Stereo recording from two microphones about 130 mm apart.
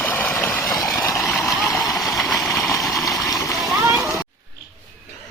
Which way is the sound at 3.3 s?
25° left (ahead or behind).